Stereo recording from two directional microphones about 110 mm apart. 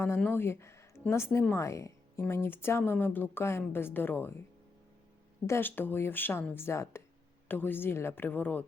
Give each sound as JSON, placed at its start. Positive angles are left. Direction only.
{"t": 0.2, "sound": "speech", "side_deg": 15}
{"t": 5.5, "sound": "speech", "side_deg": 20}